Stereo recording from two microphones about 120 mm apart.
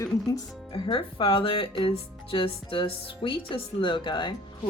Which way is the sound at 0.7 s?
45° left (ahead or behind).